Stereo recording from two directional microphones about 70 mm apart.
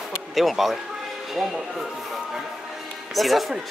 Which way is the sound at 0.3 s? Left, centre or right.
Centre.